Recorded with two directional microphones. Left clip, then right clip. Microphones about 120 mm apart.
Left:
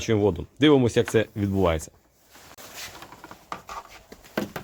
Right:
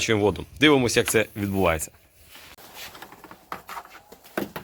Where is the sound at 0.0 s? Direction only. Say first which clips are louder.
Right 1 dB; 15° left (ahead or behind).